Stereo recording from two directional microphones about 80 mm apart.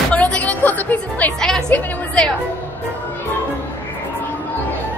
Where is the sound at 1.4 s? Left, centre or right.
Centre.